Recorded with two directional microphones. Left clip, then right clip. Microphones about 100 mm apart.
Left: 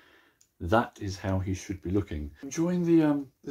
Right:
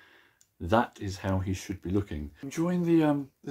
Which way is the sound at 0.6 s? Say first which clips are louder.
Even; 20° right (ahead or behind).